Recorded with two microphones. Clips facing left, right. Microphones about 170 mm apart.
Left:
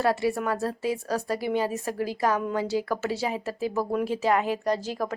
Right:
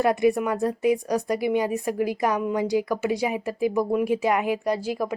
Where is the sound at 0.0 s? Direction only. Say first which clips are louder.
Right 4 dB; 15° right (ahead or behind).